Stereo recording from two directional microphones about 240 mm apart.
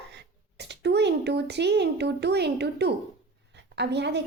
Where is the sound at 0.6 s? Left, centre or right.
Right.